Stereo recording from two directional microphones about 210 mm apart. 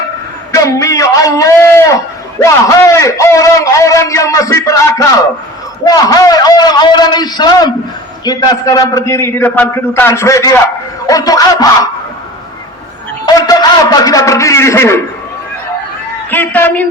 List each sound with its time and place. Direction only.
0.5 s a sound: 15° left (ahead or behind)
2.4 s a man's voice: 15° left (ahead or behind)
13.2 s a man's voice: 20° left (ahead or behind)
16.3 s a man's voice: 10° left (ahead or behind)